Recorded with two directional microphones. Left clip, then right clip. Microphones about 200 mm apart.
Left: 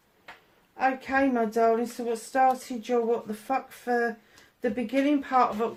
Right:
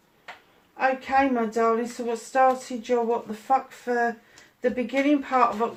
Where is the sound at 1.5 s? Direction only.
45° left (ahead or behind).